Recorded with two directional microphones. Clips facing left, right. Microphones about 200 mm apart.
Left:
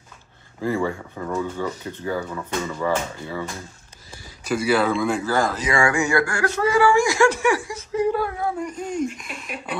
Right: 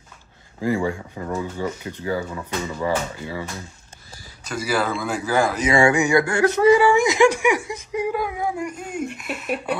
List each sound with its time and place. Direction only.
0.6 s speech: 15° right (ahead or behind)
4.5 s speech: centre (ahead or behind)
5.2 s speech: 15° right (ahead or behind)